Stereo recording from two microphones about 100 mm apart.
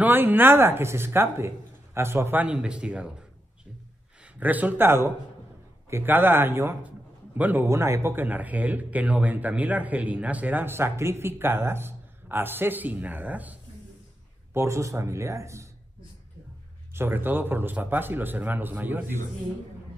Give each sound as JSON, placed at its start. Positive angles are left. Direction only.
{"t": 0.0, "sound": "a man's voice", "side_deg": -20}
{"t": 2.4, "sound": "a man's voice", "side_deg": -10}
{"t": 14.5, "sound": "a man's voice", "side_deg": -30}
{"t": 16.9, "sound": "a man's voice", "side_deg": -20}